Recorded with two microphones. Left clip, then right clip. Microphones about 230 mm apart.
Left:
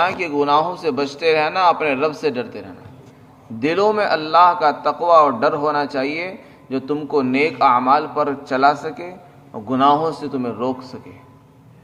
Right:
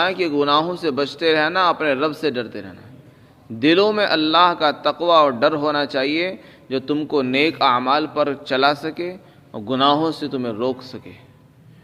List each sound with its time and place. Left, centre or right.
0.3 s a man's voice: right